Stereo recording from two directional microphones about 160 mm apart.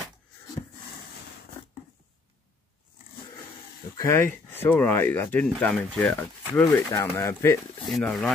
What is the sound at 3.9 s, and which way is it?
Speech, 15° left (ahead or behind).